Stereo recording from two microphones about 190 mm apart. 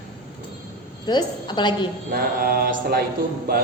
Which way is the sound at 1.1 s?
25° left (ahead or behind).